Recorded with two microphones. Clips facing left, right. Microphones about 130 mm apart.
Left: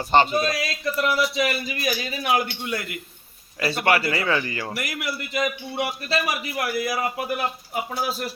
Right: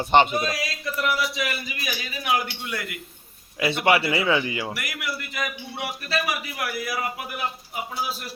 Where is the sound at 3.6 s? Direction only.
20° right (ahead or behind).